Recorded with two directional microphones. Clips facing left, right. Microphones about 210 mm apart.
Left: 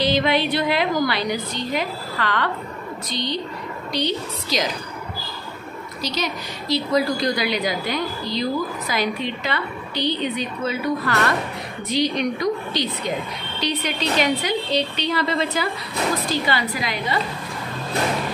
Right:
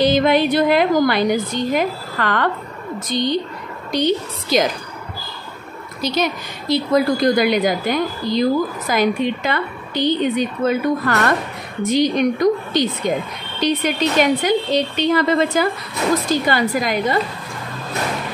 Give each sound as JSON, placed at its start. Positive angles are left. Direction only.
{"t": 0.0, "sound": "a woman's voice", "side_deg": -45}
{"t": 6.0, "sound": "a woman's voice", "side_deg": -50}